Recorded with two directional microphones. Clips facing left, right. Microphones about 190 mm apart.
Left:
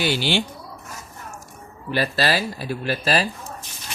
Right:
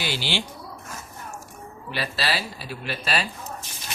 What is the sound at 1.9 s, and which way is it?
Speech, 45° left (ahead or behind).